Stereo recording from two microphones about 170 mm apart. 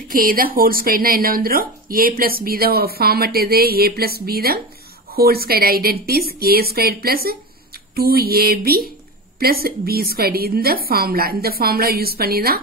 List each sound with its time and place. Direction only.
0.1 s a woman's voice: 55° right (ahead or behind)